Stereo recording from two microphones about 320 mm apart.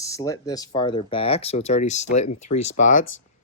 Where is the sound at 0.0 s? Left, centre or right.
Centre.